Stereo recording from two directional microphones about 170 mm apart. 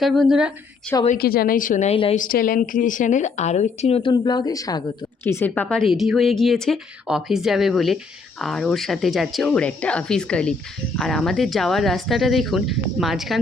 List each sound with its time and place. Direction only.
0.0 s a woman's voice: centre (ahead or behind)
1.2 s a woman's voice: 60° left (ahead or behind); by 4.1 s 35° left (ahead or behind)
4.1 s a woman's voice: 25° left (ahead or behind); by 13.4 s centre (ahead or behind)